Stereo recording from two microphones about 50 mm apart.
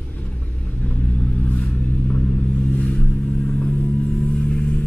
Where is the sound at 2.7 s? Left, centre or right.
Left.